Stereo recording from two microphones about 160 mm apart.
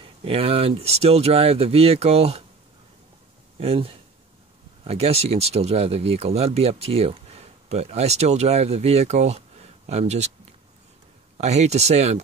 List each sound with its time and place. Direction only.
0.0 s speech: 35° right (ahead or behind)
3.5 s speech: 40° right (ahead or behind)
11.3 s speech: 45° right (ahead or behind)